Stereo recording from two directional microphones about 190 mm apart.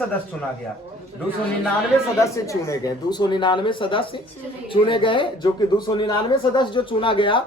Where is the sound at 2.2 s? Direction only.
15° left (ahead or behind).